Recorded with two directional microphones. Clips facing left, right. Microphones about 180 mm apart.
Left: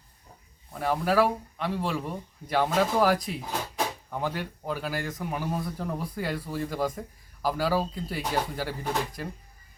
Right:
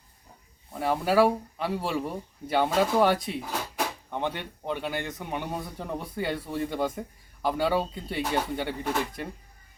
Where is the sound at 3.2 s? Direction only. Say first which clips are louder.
Right 1 dB; centre (ahead or behind).